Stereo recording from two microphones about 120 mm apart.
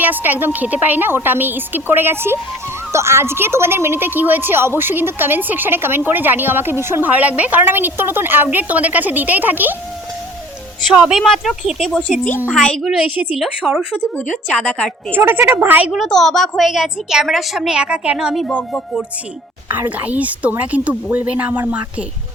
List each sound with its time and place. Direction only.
0.0 s speech: 15° right (ahead or behind)
10.9 s a woman's voice: 5° right (ahead or behind)
12.8 s a woman's voice: 5° right (ahead or behind)
14.5 s a woman's voice: 5° left (ahead or behind)
15.1 s speech: 15° right (ahead or behind)
15.9 s a woman's voice: centre (ahead or behind)
18.4 s a woman's voice: 5° left (ahead or behind)
19.6 s speech: 15° right (ahead or behind)